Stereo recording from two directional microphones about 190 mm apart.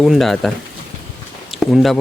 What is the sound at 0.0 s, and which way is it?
Speech, centre (ahead or behind).